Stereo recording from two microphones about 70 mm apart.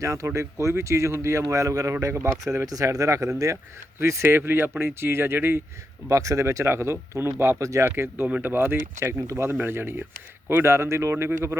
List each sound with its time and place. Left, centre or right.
0.0 s speech: right
4.0 s speech: right
6.1 s speech: right